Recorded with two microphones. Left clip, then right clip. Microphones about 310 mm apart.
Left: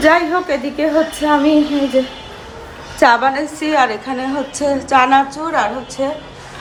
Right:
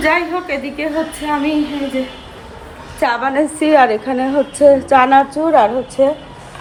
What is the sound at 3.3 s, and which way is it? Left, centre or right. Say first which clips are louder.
A woman's voice: right 4 dB; centre.